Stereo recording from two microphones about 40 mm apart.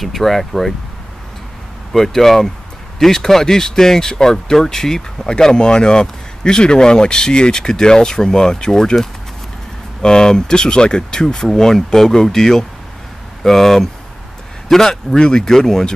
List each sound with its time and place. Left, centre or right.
0.0 s speech: centre
1.9 s speech: centre